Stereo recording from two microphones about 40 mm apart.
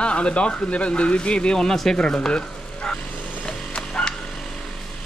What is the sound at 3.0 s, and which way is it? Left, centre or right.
Vehicle, left.